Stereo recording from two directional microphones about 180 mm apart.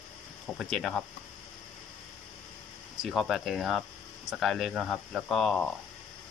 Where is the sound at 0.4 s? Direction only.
Centre (ahead or behind).